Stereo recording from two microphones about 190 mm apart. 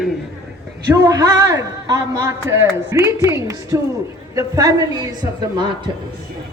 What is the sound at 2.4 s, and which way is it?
Speech, 90° right.